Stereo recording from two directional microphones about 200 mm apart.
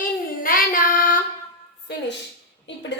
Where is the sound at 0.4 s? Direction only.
45° left (ahead or behind).